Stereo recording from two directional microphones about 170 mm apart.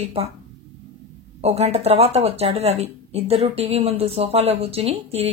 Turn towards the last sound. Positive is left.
turn(degrees=-35)  # may be behind; listen again after turning